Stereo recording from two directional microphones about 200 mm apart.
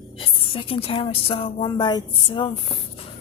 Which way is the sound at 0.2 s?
25° left (ahead or behind).